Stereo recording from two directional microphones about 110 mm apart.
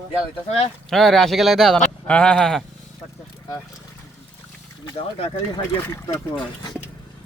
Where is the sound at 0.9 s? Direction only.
5° left (ahead or behind).